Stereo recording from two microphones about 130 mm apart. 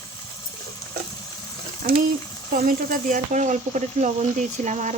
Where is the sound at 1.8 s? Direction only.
80° right.